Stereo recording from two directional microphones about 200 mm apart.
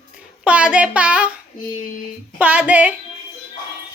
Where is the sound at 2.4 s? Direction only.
5° right (ahead or behind).